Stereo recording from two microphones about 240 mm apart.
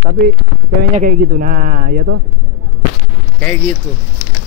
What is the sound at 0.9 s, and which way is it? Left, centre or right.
Speech, right.